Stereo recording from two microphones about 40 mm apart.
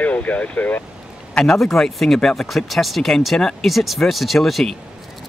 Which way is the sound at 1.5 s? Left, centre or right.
Centre.